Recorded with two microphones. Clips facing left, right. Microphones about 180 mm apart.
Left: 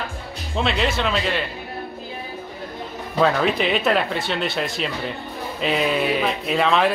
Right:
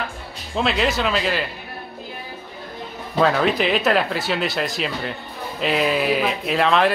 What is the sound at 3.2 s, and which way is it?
Speech, centre (ahead or behind).